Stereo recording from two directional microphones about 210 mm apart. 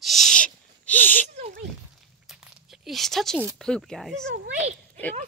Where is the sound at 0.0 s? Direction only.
Centre (ahead or behind).